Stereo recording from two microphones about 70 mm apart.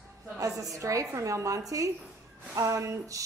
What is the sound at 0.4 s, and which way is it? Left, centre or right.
Speech, right.